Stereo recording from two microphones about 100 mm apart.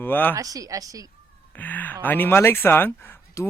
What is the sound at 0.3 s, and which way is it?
Speech, 35° right (ahead or behind).